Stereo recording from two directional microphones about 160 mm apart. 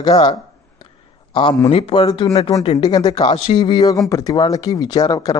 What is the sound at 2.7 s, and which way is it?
Speech, 25° left (ahead or behind).